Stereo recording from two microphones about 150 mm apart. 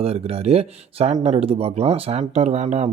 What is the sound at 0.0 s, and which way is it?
Speech, 40° right (ahead or behind).